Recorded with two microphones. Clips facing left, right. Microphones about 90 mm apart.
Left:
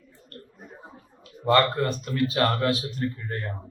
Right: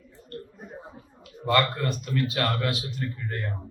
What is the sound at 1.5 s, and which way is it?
A man's voice, 35° left (ahead or behind).